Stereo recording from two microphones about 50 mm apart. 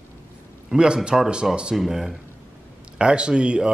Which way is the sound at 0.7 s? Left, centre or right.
Centre.